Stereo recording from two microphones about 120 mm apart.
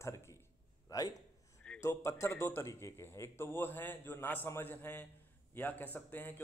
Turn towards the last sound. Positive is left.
turn(degrees=15)  # may be behind; listen again after turning